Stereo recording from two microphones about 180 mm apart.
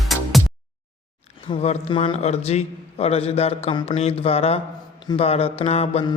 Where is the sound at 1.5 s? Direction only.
35° left (ahead or behind).